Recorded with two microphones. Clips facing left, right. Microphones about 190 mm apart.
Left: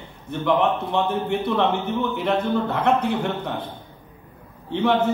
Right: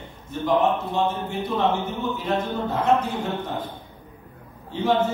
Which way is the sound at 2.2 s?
65° left (ahead or behind).